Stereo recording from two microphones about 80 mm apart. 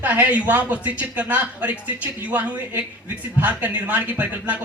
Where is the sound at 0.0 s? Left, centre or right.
Right.